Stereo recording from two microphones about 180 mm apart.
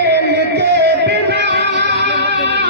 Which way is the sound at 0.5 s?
65° right (ahead or behind).